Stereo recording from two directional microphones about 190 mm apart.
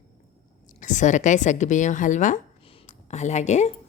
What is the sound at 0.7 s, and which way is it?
A woman's voice, 40° left (ahead or behind).